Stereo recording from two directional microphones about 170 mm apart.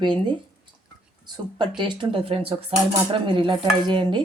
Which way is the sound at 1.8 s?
30° right (ahead or behind).